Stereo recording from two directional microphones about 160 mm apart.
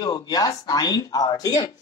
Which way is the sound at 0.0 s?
25° left (ahead or behind).